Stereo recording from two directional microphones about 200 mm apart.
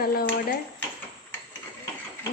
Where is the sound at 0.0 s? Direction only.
50° left (ahead or behind).